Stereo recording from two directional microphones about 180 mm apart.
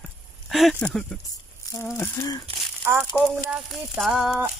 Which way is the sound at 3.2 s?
5° right (ahead or behind).